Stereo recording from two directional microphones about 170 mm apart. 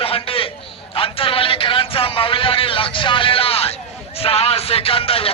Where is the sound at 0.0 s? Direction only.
35° left (ahead or behind).